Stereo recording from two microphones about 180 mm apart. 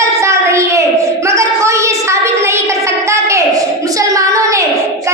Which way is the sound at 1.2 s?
15° right (ahead or behind).